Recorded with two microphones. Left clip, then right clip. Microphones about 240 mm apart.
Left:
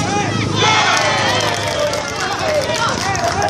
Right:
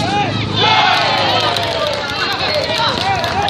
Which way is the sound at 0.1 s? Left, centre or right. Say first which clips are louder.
Right 1 dB; left.